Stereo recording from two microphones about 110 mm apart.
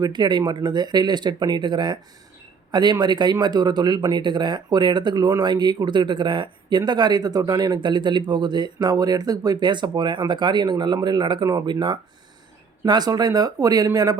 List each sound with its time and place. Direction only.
0.0 s speech: 40° right (ahead or behind)